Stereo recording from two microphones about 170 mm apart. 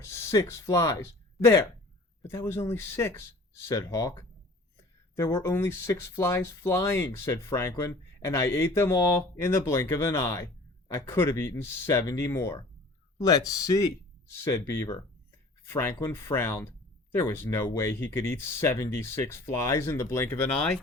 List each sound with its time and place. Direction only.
0.0 s speech: 15° left (ahead or behind)